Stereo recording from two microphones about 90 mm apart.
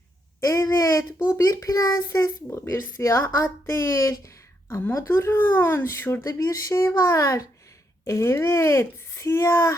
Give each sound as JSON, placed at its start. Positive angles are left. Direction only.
{"t": 0.3, "sound": "a sound", "side_deg": 35}
{"t": 1.4, "sound": "a woman's voice", "side_deg": 35}
{"t": 4.7, "sound": "a woman's voice", "side_deg": 25}